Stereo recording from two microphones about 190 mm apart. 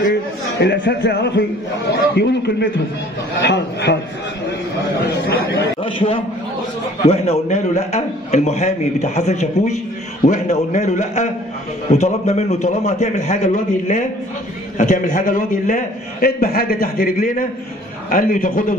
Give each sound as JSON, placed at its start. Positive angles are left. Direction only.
{"t": 0.6, "sound": "speech", "side_deg": 60}
{"t": 5.8, "sound": "a man's voice", "side_deg": 30}